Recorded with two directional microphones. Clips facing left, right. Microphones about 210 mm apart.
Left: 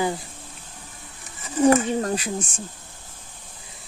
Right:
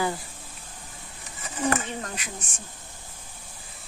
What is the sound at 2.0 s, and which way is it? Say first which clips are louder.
Speech: left 11 dB; 35° left (ahead or behind).